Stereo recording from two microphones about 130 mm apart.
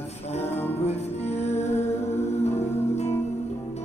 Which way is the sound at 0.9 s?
55° left (ahead or behind).